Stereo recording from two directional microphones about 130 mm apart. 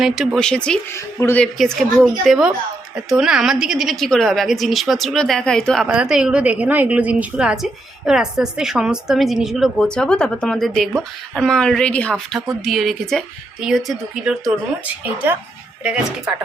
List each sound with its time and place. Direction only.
0.0 s a woman's voice: centre (ahead or behind)
0.9 s a woman's voice: 20° left (ahead or behind)
1.4 s a woman's voice: 5° left (ahead or behind)
15.0 s a woman's voice: 15° right (ahead or behind)